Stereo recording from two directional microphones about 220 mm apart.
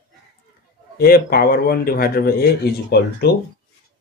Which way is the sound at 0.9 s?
45° left (ahead or behind).